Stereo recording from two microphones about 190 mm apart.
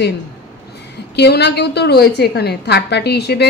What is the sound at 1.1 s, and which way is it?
A woman's voice, 60° left (ahead or behind).